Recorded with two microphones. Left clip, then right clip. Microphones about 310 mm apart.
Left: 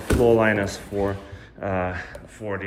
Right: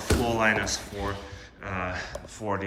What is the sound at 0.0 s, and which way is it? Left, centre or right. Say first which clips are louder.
Speech: left 6 dB; centre.